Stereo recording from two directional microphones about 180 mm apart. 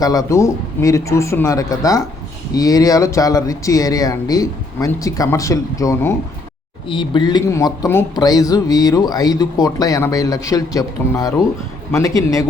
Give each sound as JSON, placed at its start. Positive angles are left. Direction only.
{"t": 0.0, "sound": "speech", "side_deg": 20}
{"t": 6.8, "sound": "speech", "side_deg": 25}